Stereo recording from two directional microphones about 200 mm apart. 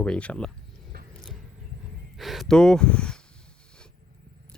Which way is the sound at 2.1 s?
Centre (ahead or behind).